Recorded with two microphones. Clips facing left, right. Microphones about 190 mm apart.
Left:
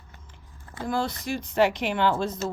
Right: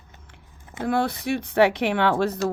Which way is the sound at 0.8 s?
65° right (ahead or behind).